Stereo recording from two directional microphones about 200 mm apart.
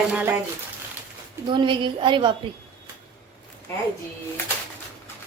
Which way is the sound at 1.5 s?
25° right (ahead or behind).